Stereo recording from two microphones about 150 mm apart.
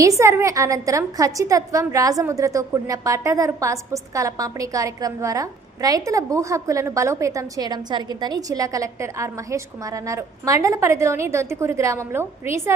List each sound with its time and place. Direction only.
0.2 s a woman's voice: 20° right (ahead or behind)